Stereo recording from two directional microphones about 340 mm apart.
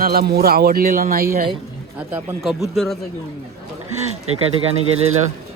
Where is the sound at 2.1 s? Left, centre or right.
Centre.